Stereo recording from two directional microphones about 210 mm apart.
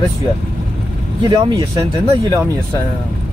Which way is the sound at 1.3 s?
15° right (ahead or behind).